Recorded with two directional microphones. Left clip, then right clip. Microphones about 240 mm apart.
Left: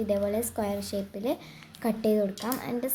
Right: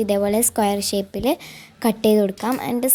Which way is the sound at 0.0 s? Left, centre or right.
Right.